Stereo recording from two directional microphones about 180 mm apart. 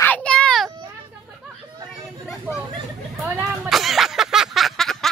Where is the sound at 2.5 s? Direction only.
10° right (ahead or behind).